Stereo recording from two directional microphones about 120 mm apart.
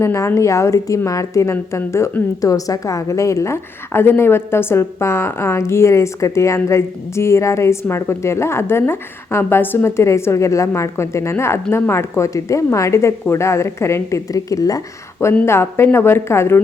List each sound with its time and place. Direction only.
0.0 s a woman's voice: 20° left (ahead or behind)